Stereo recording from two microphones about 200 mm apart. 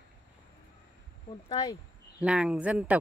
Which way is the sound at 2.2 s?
5° right (ahead or behind).